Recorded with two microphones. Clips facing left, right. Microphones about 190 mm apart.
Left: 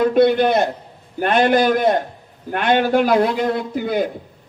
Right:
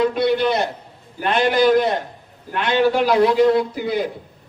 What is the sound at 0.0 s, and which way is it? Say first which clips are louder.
A man's voice: left 4 dB; 50° left (ahead or behind).